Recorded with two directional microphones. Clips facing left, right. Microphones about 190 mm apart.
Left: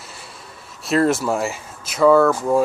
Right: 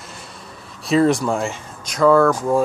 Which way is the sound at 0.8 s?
Centre (ahead or behind).